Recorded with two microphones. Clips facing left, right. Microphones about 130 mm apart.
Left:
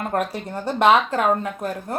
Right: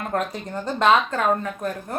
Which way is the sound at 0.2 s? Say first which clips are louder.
Left 2 dB; 5° left (ahead or behind).